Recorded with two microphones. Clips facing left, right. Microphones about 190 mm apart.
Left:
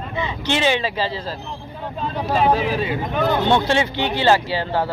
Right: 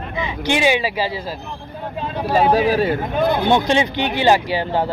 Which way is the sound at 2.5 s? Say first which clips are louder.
Right 4 dB; 40° right (ahead or behind).